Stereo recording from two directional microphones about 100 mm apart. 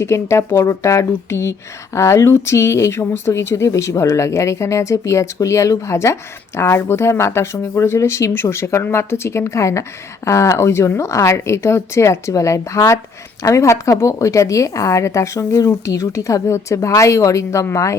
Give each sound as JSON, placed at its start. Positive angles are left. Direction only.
{"t": 0.0, "sound": "a woman's voice", "side_deg": 30}